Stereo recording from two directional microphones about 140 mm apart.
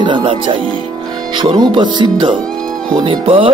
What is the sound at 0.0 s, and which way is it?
Speech, 35° right (ahead or behind).